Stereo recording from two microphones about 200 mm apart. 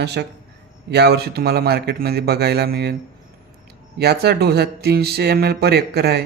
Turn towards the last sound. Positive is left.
turn(degrees=-55)  # may be behind; listen again after turning